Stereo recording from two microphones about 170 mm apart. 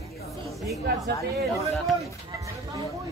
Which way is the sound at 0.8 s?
70° right (ahead or behind).